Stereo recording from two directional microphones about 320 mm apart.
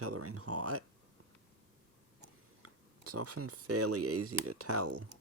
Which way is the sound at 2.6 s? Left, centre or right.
Right.